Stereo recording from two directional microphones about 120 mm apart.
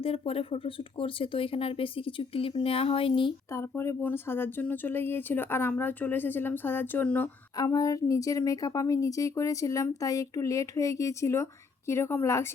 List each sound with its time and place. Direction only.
0.0 s speech: 55° left (ahead or behind)
3.5 s speech: 20° left (ahead or behind)
7.5 s a woman's voice: 30° left (ahead or behind)